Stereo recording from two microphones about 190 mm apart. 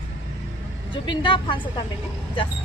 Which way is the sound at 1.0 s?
25° left (ahead or behind).